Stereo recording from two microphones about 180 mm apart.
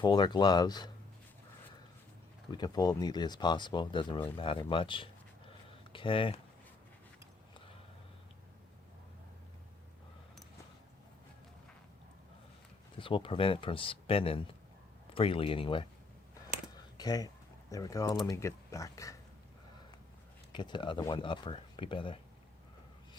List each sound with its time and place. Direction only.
0.0 s speech: 25° left (ahead or behind)
2.5 s speech: 20° left (ahead or behind)
13.0 s speech: 30° left (ahead or behind)
16.7 s a sound: 20° left (ahead or behind)
18.3 s speech: 15° left (ahead or behind)
20.5 s speech: 25° left (ahead or behind)